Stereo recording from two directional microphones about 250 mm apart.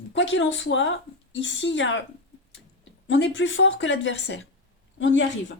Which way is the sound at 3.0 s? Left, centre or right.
Left.